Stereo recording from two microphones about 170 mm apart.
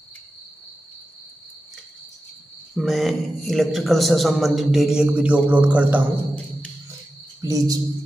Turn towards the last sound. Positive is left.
turn(degrees=-20)  # may be behind; listen again after turning